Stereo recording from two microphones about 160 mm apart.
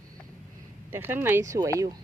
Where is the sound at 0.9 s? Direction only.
15° right (ahead or behind).